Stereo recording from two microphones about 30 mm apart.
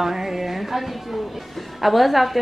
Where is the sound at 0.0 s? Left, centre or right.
Centre.